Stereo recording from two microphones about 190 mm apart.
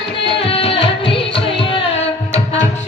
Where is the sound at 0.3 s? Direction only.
30° left (ahead or behind).